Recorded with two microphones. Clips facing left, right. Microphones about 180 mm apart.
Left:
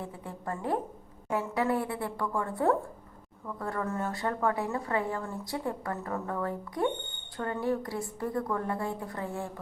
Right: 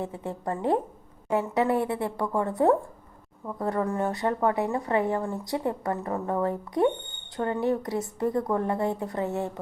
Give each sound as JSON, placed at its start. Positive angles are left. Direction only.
{"t": 0.0, "sound": "a woman's voice", "side_deg": -25}